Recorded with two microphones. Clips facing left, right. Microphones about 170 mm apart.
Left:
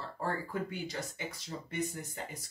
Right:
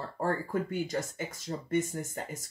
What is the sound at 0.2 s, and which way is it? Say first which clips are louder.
Speech: right 5 dB; 45° right (ahead or behind).